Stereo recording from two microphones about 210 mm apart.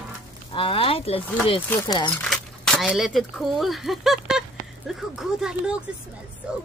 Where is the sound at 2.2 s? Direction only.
5° left (ahead or behind).